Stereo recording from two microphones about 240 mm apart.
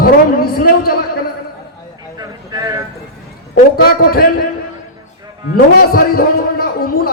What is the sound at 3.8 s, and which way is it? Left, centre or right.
Speech, left.